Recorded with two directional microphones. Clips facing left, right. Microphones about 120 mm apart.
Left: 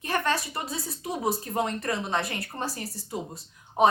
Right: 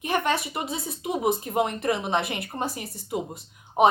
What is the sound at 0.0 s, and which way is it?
Speech, 15° right (ahead or behind).